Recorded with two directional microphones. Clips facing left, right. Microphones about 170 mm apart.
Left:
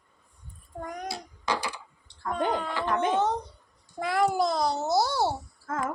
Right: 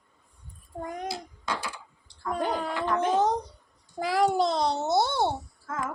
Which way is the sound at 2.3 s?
10° right (ahead or behind).